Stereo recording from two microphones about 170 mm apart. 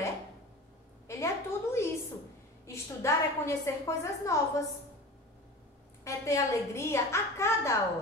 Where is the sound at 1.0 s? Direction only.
15° left (ahead or behind).